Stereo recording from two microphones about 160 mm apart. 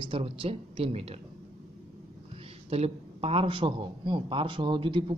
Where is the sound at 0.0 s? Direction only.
35° right (ahead or behind).